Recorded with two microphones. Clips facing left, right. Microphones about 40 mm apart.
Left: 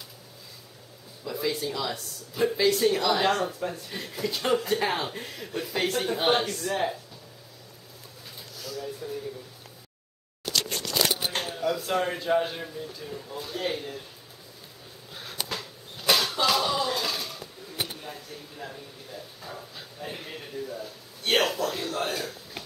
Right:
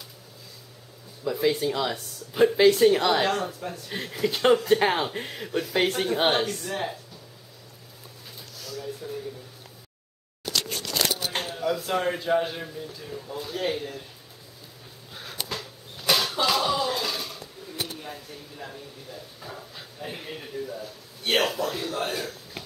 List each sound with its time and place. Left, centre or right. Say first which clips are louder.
1.4 s speech: right 5 dB; right
3.3 s a man's voice: left 2 dB; centre
3.9 s speech: right 4 dB; centre
6.5 s a man's voice: left 2 dB; centre
8.5 s a sound: even; centre
10.4 s a sound: even; centre
11.3 s camera: right 1 dB; centre
11.8 s a man's voice: right 1 dB; centre
15.1 s a sound: even; centre